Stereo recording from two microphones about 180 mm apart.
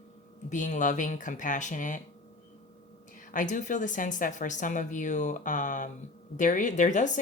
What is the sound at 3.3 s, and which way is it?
A woman's voice, 45° left (ahead or behind).